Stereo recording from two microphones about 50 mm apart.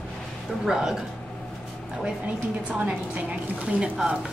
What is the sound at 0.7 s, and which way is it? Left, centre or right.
Speech, centre.